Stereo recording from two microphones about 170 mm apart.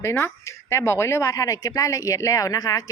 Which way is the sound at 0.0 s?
15° left (ahead or behind).